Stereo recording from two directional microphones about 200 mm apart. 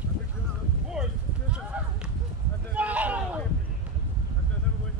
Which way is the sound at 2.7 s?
5° right (ahead or behind).